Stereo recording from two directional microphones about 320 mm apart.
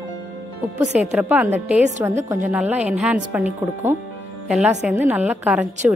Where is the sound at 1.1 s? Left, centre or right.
Centre.